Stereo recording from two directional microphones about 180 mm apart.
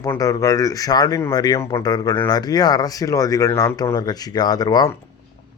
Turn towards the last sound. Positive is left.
turn(degrees=20)  # may be behind; listen again after turning